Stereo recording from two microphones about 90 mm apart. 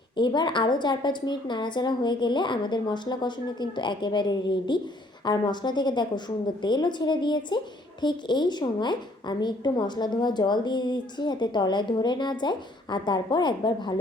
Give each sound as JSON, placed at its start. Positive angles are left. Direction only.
{"t": 0.2, "sound": "a woman's voice", "side_deg": 60}